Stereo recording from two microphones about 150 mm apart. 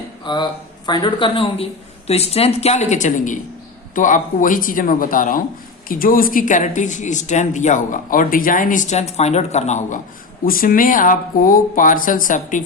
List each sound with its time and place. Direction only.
0.3 s a woman's voice: 30° left (ahead or behind); by 10.0 s 50° left (ahead or behind)
10.4 s speech: 70° left (ahead or behind)